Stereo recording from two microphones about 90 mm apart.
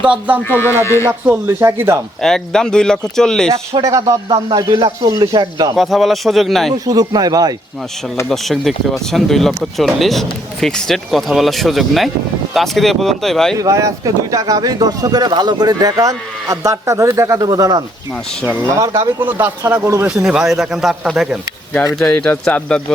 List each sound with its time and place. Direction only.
0.0 s speech: 15° right (ahead or behind)
0.4 s speech: 25° left (ahead or behind)
1.0 s speech: 25° right (ahead or behind)
2.2 s speech: 5° left (ahead or behind)
3.8 s speech: 40° right (ahead or behind)
5.7 s speech: centre (ahead or behind)
6.7 s speech: 40° right (ahead or behind)
8.3 s speech: 5° left (ahead or behind)
13.6 s speech: 35° right (ahead or behind)
19.2 s speech: 20° right (ahead or behind)
20.2 s speech: 5° right (ahead or behind)
21.9 s speech: 10° left (ahead or behind)